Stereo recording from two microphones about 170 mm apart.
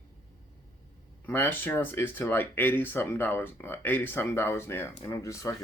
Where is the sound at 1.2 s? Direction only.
10° left (ahead or behind).